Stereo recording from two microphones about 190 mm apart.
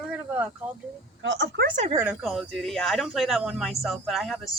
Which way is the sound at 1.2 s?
70° right (ahead or behind).